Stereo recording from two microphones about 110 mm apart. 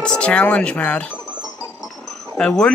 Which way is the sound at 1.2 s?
10° right (ahead or behind).